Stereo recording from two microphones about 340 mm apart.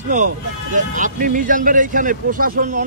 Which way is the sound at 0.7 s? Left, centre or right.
Right.